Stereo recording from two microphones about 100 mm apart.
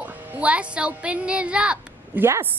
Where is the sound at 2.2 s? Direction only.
25° right (ahead or behind).